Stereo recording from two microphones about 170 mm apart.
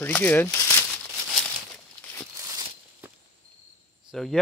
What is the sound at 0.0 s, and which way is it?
Speech, 10° left (ahead or behind).